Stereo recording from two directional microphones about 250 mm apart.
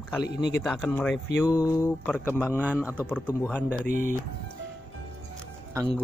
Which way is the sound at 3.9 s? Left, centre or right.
Right.